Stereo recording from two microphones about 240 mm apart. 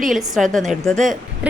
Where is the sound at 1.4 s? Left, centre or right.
Centre.